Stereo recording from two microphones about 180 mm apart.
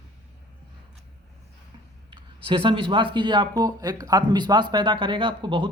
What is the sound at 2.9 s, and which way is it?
Speech, 25° right (ahead or behind).